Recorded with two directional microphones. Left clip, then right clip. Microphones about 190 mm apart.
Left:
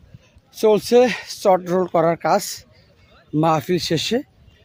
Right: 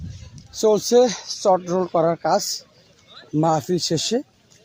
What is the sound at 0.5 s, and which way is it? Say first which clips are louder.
Speech: left 1 dB; 30° left (ahead or behind).